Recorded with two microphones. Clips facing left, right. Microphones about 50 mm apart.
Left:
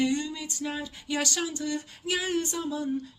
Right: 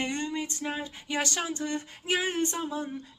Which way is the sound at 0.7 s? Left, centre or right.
Right.